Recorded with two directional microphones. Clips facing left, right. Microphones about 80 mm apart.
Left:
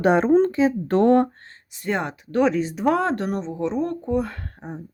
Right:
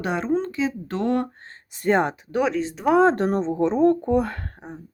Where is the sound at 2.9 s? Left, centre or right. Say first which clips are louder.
Right 7 dB; right.